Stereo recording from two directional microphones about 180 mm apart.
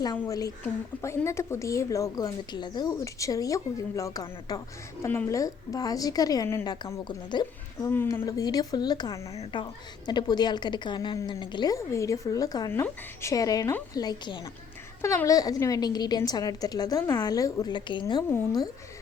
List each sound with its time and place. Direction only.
0.0 s a woman's voice: 20° left (ahead or behind)
7.9 s a woman's voice: 10° left (ahead or behind)